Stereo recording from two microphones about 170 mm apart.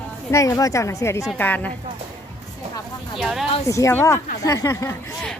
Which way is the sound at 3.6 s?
20° left (ahead or behind).